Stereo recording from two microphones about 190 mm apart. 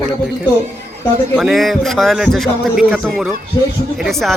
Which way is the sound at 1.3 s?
Centre (ahead or behind).